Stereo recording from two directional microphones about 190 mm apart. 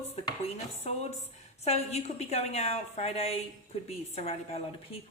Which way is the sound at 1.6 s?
35° left (ahead or behind).